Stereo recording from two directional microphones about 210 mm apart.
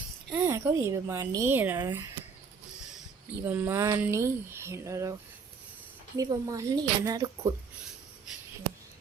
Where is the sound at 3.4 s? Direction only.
10° right (ahead or behind).